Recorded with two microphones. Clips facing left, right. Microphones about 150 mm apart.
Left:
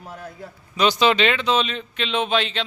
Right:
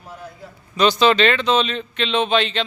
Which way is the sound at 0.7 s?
10° left (ahead or behind).